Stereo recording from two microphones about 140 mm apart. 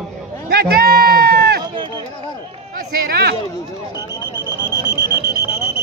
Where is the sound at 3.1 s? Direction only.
90° right.